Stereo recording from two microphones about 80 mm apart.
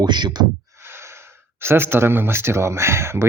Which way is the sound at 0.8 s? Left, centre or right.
Right.